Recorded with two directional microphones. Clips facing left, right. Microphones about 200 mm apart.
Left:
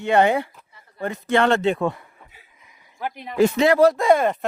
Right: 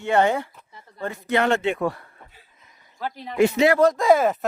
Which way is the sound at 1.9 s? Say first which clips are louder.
Left 1 dB; 15° left (ahead or behind).